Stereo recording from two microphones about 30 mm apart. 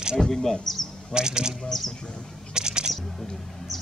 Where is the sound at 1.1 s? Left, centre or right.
Right.